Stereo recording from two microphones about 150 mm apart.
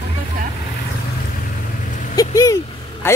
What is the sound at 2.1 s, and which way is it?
Speech, 25° left (ahead or behind).